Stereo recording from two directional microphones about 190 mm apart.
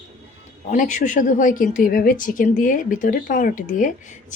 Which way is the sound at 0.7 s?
40° left (ahead or behind).